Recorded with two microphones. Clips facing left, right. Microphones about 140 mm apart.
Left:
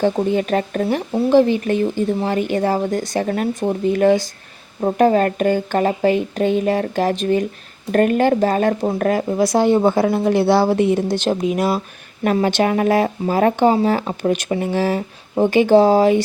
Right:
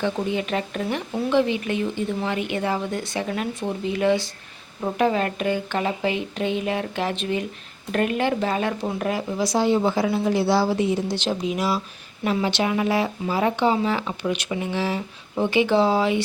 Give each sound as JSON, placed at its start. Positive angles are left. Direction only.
{"t": 0.0, "sound": "speech", "side_deg": 45}